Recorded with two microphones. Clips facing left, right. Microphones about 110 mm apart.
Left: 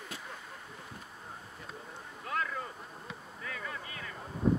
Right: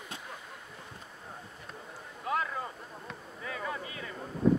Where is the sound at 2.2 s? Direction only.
15° right (ahead or behind).